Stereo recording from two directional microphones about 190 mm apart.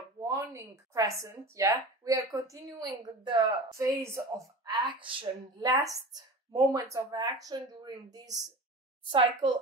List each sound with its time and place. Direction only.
0.2 s a woman's voice: 15° right (ahead or behind)